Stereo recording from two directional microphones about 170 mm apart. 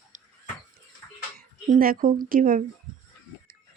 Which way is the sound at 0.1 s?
45° right (ahead or behind).